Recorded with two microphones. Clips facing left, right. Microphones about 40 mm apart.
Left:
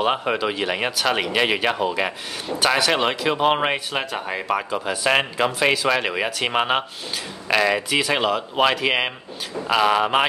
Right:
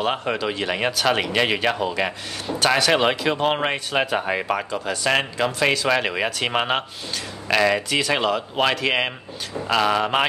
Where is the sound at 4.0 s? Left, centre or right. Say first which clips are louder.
Right 4 dB; centre.